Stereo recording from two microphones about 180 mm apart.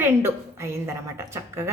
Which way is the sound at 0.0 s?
15° right (ahead or behind).